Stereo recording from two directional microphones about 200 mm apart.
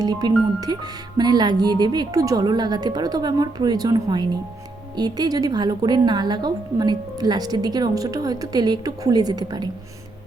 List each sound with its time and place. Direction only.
0.0 s a woman's voice: 20° right (ahead or behind)